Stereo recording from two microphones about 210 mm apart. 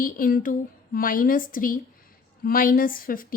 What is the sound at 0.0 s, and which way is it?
A woman's voice, 40° left (ahead or behind).